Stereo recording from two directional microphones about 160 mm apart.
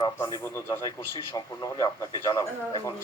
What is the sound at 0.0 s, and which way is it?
A man's voice, 20° left (ahead or behind).